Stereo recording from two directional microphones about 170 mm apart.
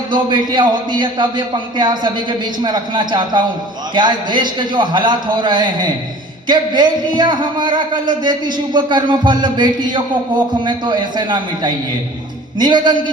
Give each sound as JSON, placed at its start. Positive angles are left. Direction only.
{"t": 0.1, "sound": "speech", "side_deg": -25}